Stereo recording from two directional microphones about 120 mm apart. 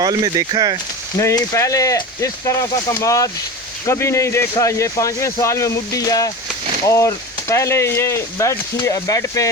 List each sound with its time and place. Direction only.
0.0 s speech: 35° right (ahead or behind)
1.2 s speech: 25° left (ahead or behind)